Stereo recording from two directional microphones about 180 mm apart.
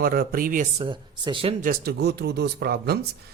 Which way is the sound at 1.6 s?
55° right (ahead or behind).